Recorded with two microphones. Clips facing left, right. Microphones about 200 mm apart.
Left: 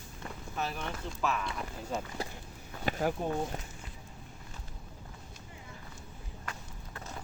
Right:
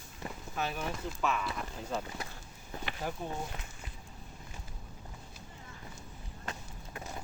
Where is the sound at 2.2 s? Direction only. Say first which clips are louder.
Left 5 dB; 30° left (ahead or behind).